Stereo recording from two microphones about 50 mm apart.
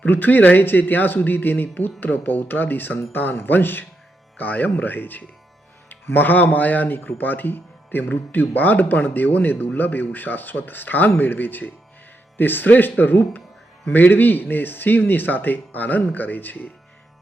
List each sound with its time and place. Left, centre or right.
0.0 s speech: left